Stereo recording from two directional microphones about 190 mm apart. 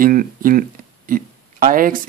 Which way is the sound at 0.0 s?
45° right (ahead or behind).